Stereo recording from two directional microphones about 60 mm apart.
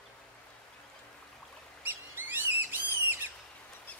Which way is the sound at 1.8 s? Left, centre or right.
Right.